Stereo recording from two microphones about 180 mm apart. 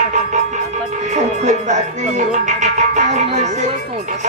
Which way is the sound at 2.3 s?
40° right (ahead or behind).